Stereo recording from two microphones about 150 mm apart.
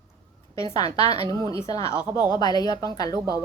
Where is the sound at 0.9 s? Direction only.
30° right (ahead or behind).